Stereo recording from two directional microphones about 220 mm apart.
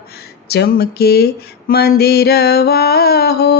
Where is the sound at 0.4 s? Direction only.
45° left (ahead or behind).